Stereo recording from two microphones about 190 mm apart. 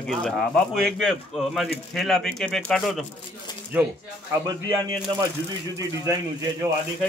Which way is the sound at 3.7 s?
10° right (ahead or behind).